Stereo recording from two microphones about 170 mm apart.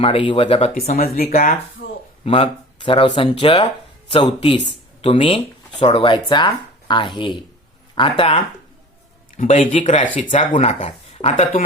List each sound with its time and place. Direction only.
0.0 s speech: 30° left (ahead or behind)
0.9 s speech: 60° left (ahead or behind)
2.2 s speech: 35° left (ahead or behind)
9.4 s speech: 50° left (ahead or behind)